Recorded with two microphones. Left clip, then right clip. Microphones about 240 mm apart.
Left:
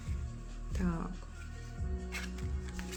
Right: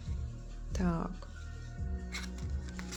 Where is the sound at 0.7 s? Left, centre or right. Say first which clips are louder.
Right 3 dB; centre.